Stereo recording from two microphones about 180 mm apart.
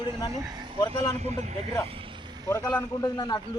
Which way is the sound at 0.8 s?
20° left (ahead or behind).